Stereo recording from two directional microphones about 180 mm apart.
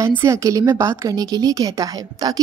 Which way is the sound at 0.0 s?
15° right (ahead or behind).